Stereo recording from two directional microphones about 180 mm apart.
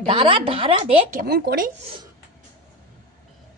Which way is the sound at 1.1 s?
60° right (ahead or behind).